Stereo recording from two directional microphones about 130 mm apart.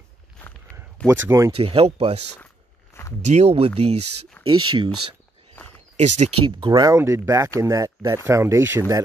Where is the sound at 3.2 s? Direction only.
55° right (ahead or behind).